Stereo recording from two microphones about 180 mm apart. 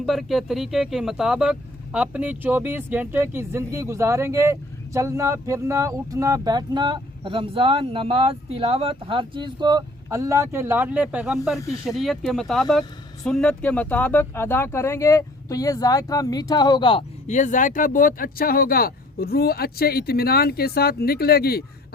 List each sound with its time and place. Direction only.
0.0 s speech: centre (ahead or behind); by 21.6 s 60° left (ahead or behind)